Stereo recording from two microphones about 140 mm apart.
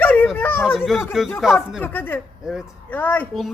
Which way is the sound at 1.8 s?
15° left (ahead or behind).